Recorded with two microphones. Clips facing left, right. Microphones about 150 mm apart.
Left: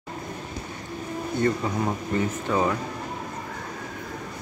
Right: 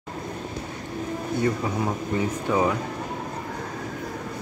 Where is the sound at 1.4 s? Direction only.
10° right (ahead or behind).